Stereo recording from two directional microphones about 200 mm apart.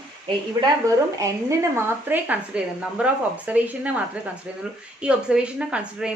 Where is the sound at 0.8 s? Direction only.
15° right (ahead or behind).